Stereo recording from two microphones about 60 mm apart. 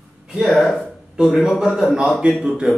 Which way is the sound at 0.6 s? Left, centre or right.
Centre.